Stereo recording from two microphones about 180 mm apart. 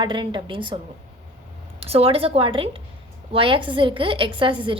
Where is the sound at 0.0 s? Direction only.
25° right (ahead or behind).